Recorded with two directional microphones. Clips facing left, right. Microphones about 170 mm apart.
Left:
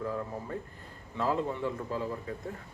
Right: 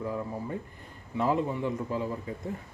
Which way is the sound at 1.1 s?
20° right (ahead or behind).